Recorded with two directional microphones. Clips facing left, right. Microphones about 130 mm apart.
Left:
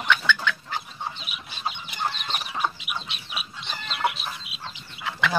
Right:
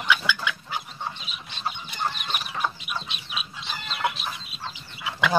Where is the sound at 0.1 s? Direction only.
10° right (ahead or behind).